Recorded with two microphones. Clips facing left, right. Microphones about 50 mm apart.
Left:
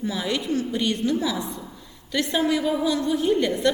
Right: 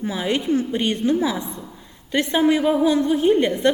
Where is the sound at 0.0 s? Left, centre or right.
Right.